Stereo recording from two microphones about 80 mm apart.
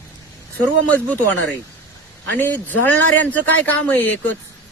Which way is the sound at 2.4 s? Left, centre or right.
Left.